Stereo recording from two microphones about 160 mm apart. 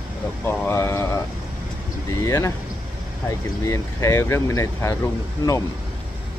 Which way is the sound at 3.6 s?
20° left (ahead or behind).